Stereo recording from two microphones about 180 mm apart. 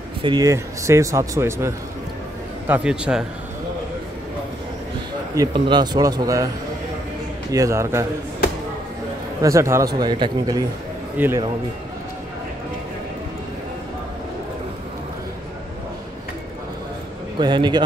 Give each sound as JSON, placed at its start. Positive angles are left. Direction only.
{"t": 0.2, "sound": "a man's voice", "side_deg": -20}
{"t": 2.7, "sound": "a man's voice", "side_deg": -5}
{"t": 5.3, "sound": "speech", "side_deg": -20}
{"t": 7.5, "sound": "a man's voice", "side_deg": -15}
{"t": 9.4, "sound": "speech", "side_deg": -15}
{"t": 11.1, "sound": "a man's voice", "side_deg": -10}
{"t": 17.4, "sound": "speech", "side_deg": -25}